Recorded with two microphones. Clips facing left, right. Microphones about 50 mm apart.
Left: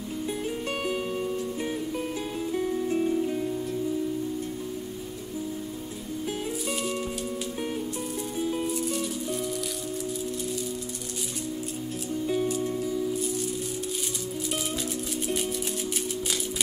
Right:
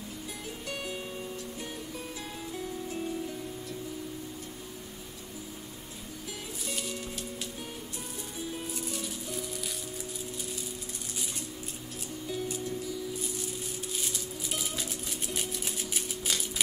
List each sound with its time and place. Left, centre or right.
0.7 s music: left
2.5 s music: left
8.7 s music: centre
12.6 s music: left